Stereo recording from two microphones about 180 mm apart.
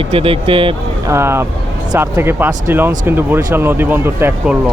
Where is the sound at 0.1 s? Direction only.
30° right (ahead or behind).